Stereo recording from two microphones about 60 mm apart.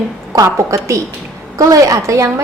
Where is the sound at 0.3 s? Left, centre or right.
Right.